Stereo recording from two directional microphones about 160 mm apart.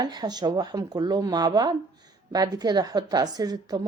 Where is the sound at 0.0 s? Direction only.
25° right (ahead or behind).